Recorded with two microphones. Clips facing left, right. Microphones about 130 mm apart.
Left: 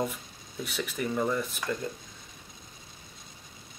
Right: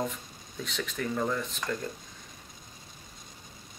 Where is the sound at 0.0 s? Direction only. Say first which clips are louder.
Left 2 dB; 5° left (ahead or behind).